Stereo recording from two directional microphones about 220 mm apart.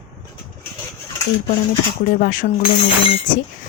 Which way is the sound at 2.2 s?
40° left (ahead or behind).